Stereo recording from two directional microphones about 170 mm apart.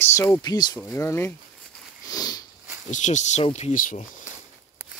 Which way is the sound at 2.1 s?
20° left (ahead or behind).